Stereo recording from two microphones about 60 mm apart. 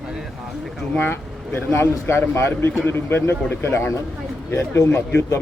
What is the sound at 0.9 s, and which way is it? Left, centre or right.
A man's voice, left.